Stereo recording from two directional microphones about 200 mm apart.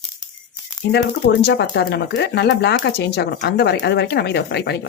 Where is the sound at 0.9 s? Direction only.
60° left (ahead or behind).